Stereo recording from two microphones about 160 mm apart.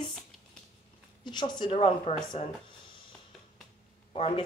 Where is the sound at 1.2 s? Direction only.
30° left (ahead or behind).